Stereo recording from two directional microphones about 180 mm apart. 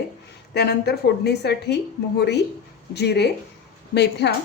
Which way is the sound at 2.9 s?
65° left (ahead or behind).